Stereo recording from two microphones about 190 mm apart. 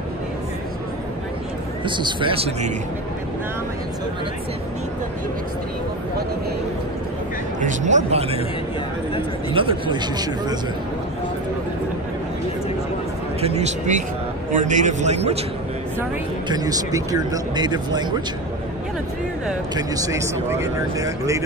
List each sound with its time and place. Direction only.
1.9 s speech: 25° right (ahead or behind)
7.6 s speech: 40° right (ahead or behind)
9.5 s speech: 30° right (ahead or behind)
13.4 s speech: 35° right (ahead or behind)
16.4 s speech: 20° right (ahead or behind)
19.7 s speech: 20° right (ahead or behind)